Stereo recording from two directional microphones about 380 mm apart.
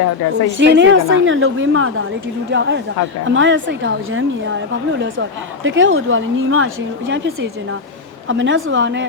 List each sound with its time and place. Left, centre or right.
0.5 s a woman's voice: right